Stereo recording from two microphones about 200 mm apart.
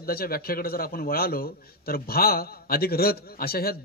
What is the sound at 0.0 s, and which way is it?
A man's voice, 50° left (ahead or behind).